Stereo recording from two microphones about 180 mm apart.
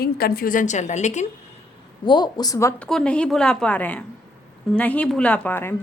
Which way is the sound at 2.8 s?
5° left (ahead or behind).